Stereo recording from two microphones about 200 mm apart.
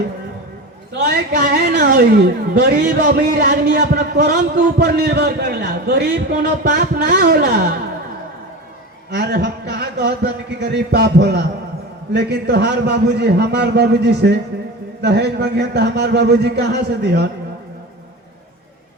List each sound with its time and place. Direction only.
0.9 s a woman's voice: 55° right (ahead or behind)
9.0 s a man's voice: 55° right (ahead or behind)